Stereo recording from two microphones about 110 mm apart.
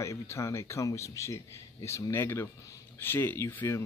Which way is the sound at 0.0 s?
25° left (ahead or behind).